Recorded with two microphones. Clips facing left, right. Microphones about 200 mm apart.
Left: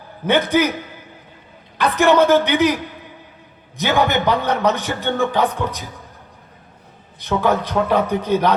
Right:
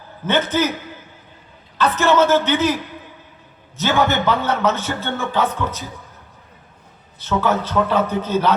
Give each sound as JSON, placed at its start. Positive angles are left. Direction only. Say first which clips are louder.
{"t": 0.3, "sound": "a man's voice", "louder": "left 2 dB", "side_deg": 15}
{"t": 1.8, "sound": "a man's voice", "louder": "left 2 dB", "side_deg": 15}
{"t": 7.2, "sound": "a man's voice", "louder": "left 1 dB", "side_deg": 15}